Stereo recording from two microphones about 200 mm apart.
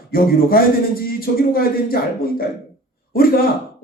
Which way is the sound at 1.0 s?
45° left (ahead or behind).